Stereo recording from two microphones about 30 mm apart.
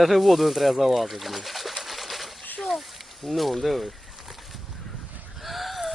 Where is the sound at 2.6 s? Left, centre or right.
Centre.